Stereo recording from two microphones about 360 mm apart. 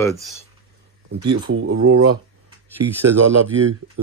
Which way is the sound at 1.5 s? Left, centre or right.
Right.